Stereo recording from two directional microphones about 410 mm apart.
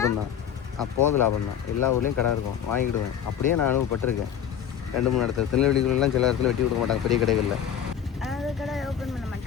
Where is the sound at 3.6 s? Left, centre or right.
Left.